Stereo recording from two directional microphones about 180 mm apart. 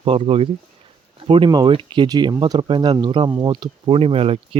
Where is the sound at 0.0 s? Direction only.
30° right (ahead or behind).